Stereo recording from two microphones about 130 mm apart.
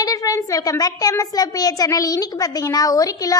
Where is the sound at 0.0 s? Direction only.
25° left (ahead or behind).